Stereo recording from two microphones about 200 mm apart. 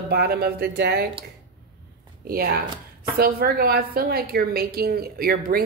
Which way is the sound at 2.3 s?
50° right (ahead or behind).